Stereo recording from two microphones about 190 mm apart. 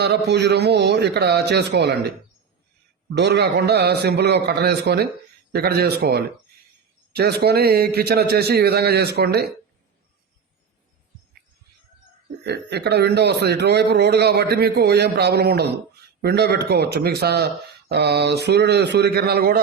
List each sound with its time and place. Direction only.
0.3 s speech: 65° right (ahead or behind)
3.2 s speech: 60° right (ahead or behind)
12.5 s speech: 60° right (ahead or behind)